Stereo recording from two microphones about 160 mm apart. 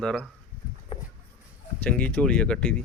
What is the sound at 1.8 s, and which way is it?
Speech, 10° left (ahead or behind).